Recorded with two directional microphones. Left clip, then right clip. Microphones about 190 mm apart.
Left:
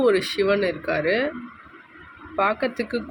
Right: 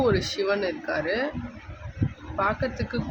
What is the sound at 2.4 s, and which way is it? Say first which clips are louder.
Speech: left 4 dB; 15° left (ahead or behind).